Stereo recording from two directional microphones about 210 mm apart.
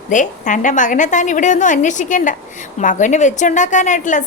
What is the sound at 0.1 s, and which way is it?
A woman's voice, 35° left (ahead or behind).